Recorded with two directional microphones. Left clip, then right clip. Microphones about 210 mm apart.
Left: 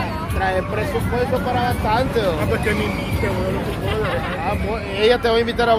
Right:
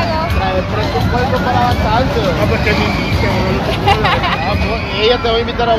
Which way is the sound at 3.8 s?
50° right (ahead or behind).